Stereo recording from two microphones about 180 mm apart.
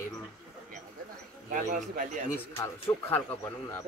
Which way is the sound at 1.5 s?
45° right (ahead or behind).